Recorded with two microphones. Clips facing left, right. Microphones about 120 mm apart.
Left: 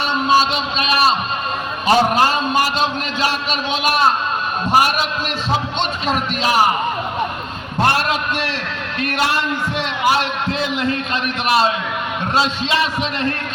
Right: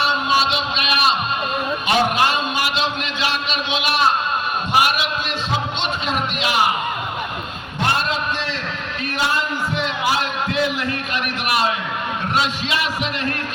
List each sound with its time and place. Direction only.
0.0 s a sound: 40° left (ahead or behind)
1.9 s a man's voice: 35° left (ahead or behind)
9.0 s a man's voice: 70° left (ahead or behind)
10.5 s a man's voice: 25° left (ahead or behind)